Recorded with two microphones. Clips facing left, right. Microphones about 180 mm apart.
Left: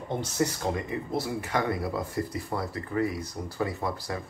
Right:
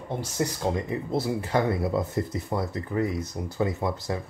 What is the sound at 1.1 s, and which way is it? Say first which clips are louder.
Speech: right 4 dB; 25° right (ahead or behind).